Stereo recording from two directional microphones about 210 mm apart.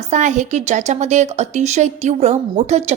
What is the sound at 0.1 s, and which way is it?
A woman's voice, 35° right (ahead or behind).